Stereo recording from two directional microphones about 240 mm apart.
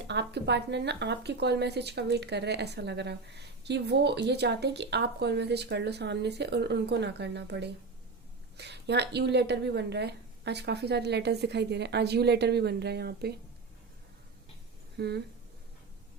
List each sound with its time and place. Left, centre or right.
0.1 s speech: right
14.9 s speech: right